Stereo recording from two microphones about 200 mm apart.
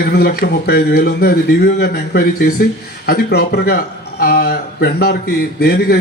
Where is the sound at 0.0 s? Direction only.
50° left (ahead or behind).